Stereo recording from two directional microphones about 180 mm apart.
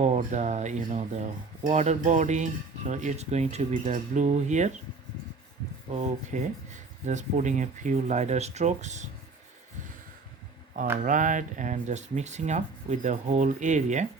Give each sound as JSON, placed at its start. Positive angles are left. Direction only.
{"t": 0.0, "sound": "speech", "side_deg": -40}
{"t": 5.9, "sound": "speech", "side_deg": -40}
{"t": 11.0, "sound": "speech", "side_deg": -45}